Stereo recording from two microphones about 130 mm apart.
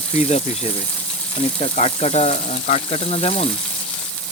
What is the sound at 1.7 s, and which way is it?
Speech, 60° left (ahead or behind).